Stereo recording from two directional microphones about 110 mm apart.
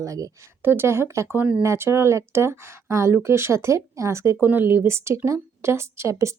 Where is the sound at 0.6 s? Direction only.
20° right (ahead or behind).